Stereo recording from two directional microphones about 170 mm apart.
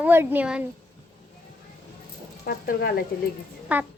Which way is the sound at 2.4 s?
60° left (ahead or behind).